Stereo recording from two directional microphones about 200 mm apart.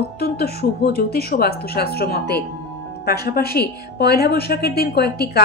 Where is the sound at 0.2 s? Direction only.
50° left (ahead or behind).